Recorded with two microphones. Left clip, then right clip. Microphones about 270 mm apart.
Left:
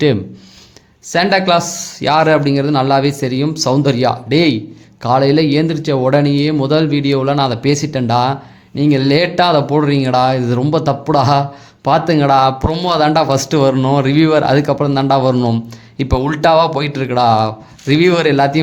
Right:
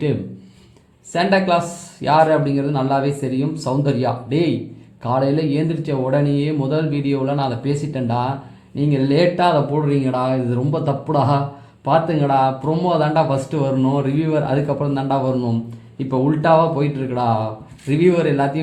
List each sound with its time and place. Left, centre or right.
1.1 s speech: left